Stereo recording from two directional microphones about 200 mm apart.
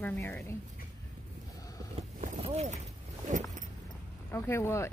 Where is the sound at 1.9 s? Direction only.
35° right (ahead or behind).